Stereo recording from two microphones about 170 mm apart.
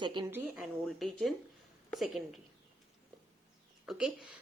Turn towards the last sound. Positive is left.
turn(degrees=-5)  # may be behind; listen again after turning